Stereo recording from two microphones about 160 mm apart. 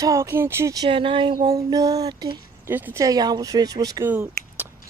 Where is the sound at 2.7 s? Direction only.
15° right (ahead or behind).